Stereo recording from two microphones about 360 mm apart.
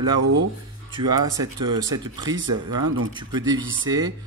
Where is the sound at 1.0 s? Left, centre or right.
Centre.